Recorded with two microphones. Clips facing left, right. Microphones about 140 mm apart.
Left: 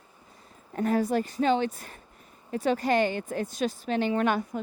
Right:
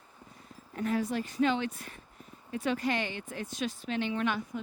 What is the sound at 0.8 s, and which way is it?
Speech, 45° left (ahead or behind).